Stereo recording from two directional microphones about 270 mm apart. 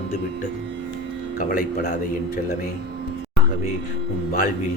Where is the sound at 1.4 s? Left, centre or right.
Left.